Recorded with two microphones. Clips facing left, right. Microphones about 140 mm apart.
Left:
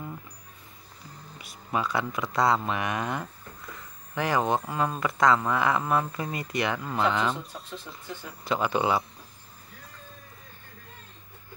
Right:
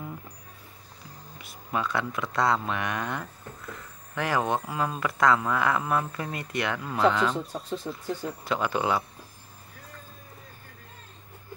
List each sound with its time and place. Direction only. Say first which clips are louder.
1.4 s speech: left 1 dB; centre (ahead or behind)
7.5 s speech: right 8 dB; 40° right (ahead or behind)
8.5 s speech: left 2 dB; centre (ahead or behind)